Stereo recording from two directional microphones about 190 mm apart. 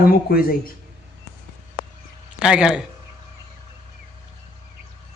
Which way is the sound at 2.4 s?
5° right (ahead or behind).